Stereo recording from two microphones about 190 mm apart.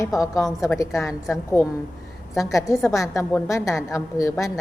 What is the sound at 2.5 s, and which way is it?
A woman's voice, 15° left (ahead or behind).